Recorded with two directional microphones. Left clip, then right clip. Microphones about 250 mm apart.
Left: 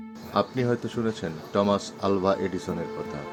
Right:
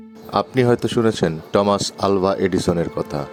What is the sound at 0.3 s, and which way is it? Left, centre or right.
Speech, right.